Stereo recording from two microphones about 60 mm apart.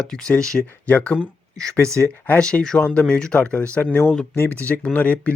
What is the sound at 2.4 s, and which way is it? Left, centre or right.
Speech, centre.